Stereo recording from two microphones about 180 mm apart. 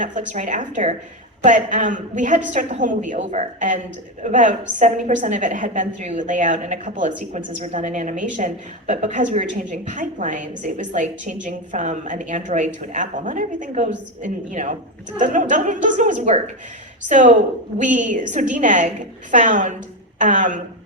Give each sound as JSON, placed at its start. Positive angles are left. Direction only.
{"t": 0.0, "sound": "a woman's voice", "side_deg": -45}